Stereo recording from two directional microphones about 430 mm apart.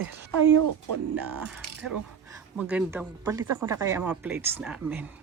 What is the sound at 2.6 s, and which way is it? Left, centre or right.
A woman's voice, centre.